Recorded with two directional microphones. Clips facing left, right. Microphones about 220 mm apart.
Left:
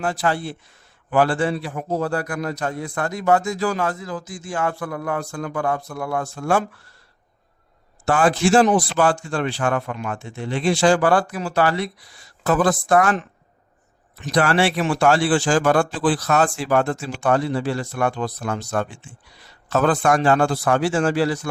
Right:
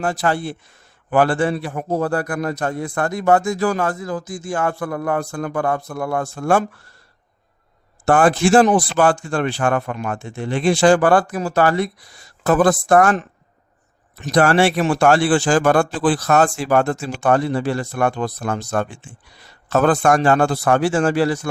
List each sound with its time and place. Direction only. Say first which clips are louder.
0.0 s a man's voice: right 2 dB; 45° right (ahead or behind)
8.0 s a man's voice: right 3 dB; 55° right (ahead or behind)